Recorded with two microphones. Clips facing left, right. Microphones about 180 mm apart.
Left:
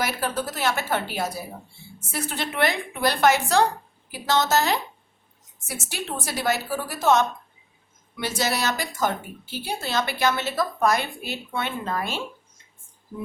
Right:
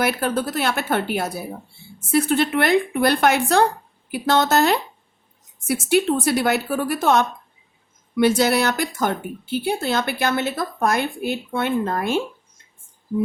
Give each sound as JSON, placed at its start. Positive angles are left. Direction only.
{"t": 0.0, "sound": "a woman's voice", "side_deg": -60}